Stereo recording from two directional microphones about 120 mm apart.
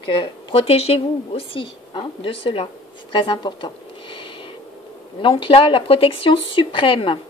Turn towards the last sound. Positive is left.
turn(degrees=45)  # may be behind; listen again after turning